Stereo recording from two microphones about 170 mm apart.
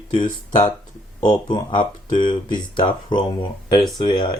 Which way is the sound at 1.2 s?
25° left (ahead or behind).